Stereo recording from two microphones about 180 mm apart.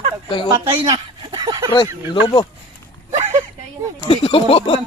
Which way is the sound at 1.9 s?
15° right (ahead or behind).